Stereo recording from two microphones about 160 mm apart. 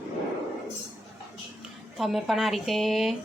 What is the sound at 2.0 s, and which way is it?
Speech, centre (ahead or behind).